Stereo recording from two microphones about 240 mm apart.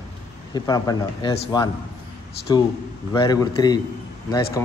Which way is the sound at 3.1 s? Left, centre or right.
Centre.